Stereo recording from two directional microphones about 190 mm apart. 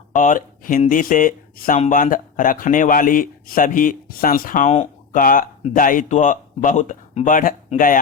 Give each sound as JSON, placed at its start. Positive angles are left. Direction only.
{"t": 0.1, "sound": "speech", "side_deg": 45}